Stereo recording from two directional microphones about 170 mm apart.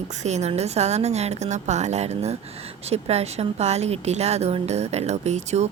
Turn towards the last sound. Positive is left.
turn(degrees=-40)  # may be behind; listen again after turning